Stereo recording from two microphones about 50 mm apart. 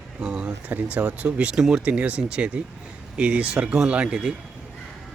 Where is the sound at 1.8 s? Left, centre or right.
Right.